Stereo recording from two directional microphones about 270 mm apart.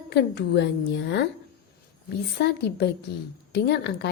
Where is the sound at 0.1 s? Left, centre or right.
Left.